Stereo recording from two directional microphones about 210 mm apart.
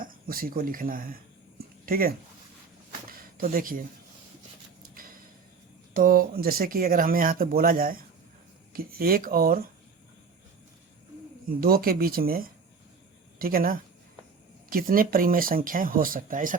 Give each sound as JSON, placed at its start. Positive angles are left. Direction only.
{"t": 0.0, "sound": "speech", "side_deg": -45}
{"t": 3.1, "sound": "a sound", "side_deg": -45}
{"t": 5.9, "sound": "speech", "side_deg": -40}
{"t": 11.4, "sound": "speech", "side_deg": -45}